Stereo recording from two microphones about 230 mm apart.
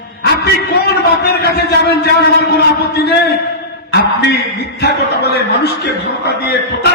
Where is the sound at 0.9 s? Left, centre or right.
Left.